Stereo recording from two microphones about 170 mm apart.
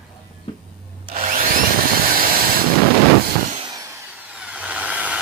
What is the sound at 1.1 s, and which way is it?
Wood, 50° right (ahead or behind).